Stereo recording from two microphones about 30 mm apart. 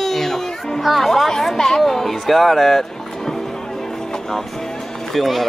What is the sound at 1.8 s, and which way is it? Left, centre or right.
Music, centre.